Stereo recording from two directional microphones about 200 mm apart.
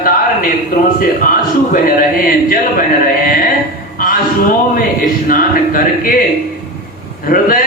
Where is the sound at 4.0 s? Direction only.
45° left (ahead or behind).